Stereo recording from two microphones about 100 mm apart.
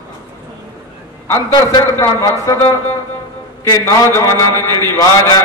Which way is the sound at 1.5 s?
35° left (ahead or behind).